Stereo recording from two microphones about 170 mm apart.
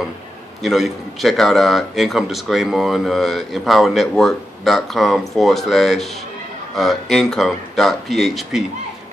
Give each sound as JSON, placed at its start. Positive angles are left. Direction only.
{"t": 0.6, "sound": "a man's voice", "side_deg": 0}